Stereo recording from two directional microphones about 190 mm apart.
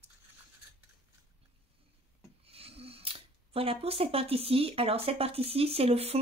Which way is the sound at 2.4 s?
30° right (ahead or behind).